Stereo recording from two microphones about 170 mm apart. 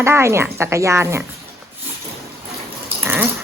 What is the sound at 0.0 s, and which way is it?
Speech, 15° right (ahead or behind).